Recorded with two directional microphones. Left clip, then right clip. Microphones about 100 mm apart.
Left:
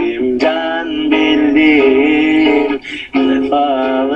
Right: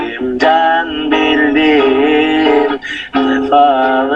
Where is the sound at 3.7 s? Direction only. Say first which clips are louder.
Right 3 dB; 15° left (ahead or behind).